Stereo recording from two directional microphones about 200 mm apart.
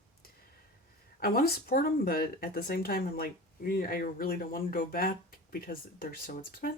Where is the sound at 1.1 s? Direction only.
45° left (ahead or behind).